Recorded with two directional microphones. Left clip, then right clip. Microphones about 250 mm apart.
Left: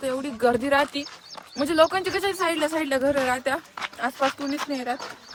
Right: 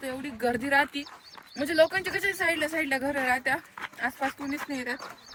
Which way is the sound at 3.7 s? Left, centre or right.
Centre.